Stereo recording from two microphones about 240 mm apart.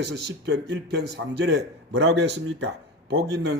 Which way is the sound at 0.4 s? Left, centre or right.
Right.